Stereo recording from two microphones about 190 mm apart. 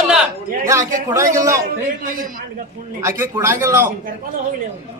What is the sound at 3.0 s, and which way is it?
Speech, 15° right (ahead or behind).